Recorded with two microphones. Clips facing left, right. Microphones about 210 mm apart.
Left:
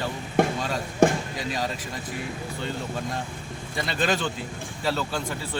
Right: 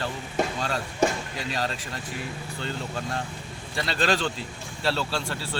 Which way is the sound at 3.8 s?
10° left (ahead or behind).